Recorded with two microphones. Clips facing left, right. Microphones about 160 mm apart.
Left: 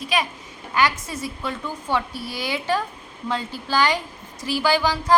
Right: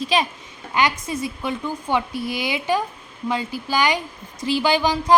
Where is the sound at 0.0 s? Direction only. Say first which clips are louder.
Right 3 dB; 25° right (ahead or behind).